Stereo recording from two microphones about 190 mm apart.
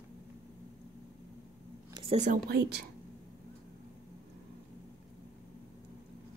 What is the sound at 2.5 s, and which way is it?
Speech, 60° right (ahead or behind).